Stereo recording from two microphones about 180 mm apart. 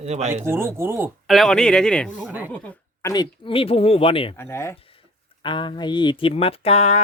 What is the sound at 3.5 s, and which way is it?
Speech, 30° left (ahead or behind).